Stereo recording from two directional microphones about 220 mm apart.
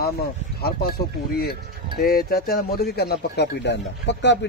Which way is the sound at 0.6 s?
45° left (ahead or behind).